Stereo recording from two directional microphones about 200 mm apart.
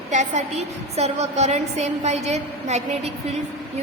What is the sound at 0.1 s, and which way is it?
A woman's voice, 35° right (ahead or behind).